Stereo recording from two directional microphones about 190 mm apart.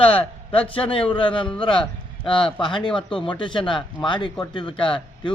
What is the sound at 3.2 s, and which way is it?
A man's voice, 25° left (ahead or behind).